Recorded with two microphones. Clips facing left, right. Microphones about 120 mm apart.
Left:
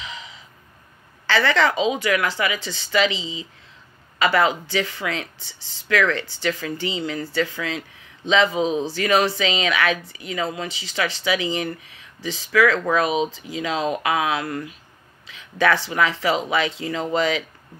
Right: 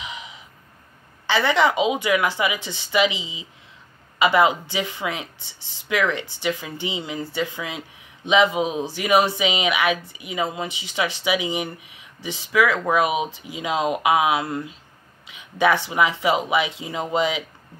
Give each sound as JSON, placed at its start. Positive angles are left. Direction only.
{"t": 0.0, "sound": "gasp", "side_deg": -15}
{"t": 1.2, "sound": "speech", "side_deg": -15}